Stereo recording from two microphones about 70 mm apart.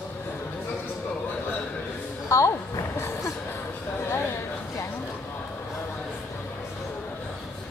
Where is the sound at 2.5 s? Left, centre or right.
Left.